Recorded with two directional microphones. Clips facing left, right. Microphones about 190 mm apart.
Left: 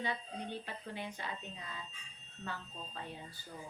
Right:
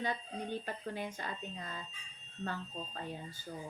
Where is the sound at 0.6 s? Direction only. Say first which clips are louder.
Right 4 dB; 45° right (ahead or behind).